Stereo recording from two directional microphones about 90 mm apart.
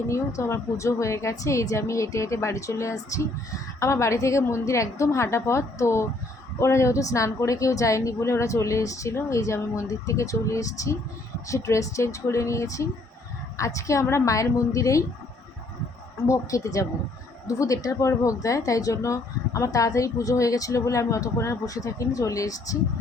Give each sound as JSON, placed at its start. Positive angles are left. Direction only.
{"t": 0.1, "sound": "speech", "side_deg": 30}
{"t": 16.2, "sound": "speech", "side_deg": 35}